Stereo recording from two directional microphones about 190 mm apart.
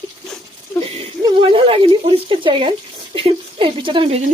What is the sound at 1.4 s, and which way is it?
Speech, 30° right (ahead or behind).